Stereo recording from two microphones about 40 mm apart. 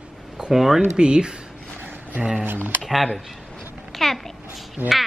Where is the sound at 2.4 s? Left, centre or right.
Right.